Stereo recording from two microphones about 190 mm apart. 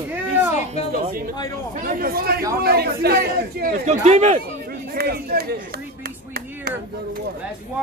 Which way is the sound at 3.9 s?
35° right (ahead or behind).